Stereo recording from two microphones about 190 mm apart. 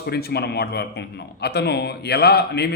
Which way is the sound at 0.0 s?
55° left (ahead or behind).